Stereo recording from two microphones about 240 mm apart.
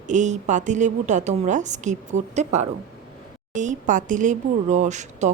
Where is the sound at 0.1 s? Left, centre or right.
Right.